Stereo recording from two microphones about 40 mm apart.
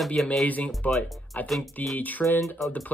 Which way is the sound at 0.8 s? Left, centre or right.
Left.